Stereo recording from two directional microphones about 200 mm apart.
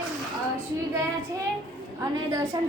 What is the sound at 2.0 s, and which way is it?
Speech, 15° right (ahead or behind).